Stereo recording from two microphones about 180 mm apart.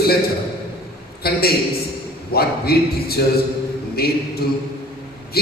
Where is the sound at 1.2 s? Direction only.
60° left (ahead or behind).